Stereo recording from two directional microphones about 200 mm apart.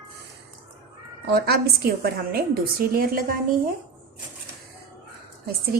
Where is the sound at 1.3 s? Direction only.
50° right (ahead or behind).